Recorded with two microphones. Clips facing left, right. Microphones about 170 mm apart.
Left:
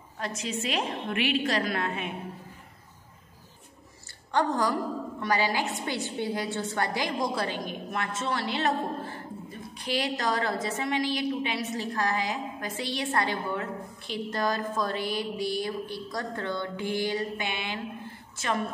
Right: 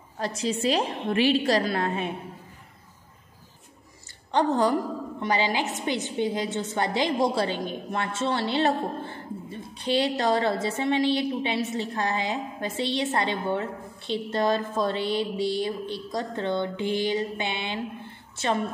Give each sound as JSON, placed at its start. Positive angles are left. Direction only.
{"t": 0.2, "sound": "a woman's voice", "side_deg": -35}
{"t": 4.3, "sound": "a woman's voice", "side_deg": -25}